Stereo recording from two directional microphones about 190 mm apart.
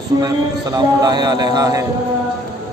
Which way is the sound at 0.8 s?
20° right (ahead or behind).